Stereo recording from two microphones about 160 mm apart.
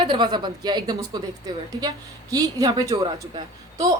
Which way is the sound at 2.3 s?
25° right (ahead or behind).